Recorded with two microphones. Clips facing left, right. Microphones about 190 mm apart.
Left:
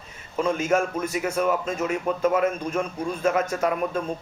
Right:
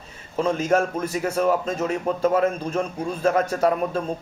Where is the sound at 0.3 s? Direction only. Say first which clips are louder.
Right 2 dB; 35° right (ahead or behind).